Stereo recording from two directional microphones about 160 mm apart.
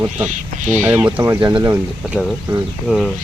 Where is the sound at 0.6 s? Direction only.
50° right (ahead or behind).